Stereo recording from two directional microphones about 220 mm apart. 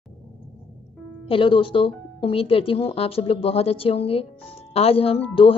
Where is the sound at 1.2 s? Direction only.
25° left (ahead or behind).